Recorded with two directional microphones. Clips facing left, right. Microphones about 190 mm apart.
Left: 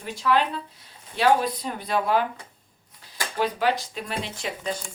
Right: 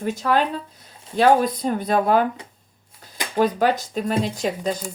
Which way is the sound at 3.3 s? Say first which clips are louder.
Right 5 dB; 45° right (ahead or behind).